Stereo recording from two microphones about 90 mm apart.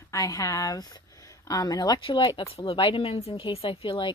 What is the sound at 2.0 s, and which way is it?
Speech, 65° left (ahead or behind).